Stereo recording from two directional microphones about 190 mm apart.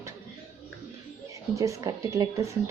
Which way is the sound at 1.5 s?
15° right (ahead or behind).